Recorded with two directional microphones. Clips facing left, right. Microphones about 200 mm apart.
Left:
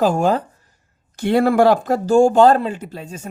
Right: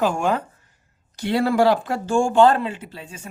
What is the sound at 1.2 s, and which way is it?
Speech, 50° left (ahead or behind).